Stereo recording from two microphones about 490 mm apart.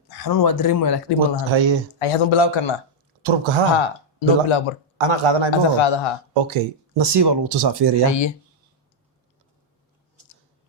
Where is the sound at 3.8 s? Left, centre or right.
Left.